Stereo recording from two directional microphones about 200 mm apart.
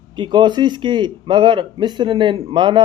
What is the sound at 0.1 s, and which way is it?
Speech, 25° right (ahead or behind).